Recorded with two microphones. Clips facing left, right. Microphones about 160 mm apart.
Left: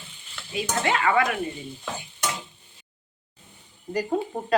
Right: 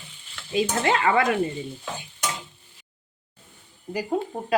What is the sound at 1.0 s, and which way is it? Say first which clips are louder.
Speech: right 1 dB; 30° right (ahead or behind).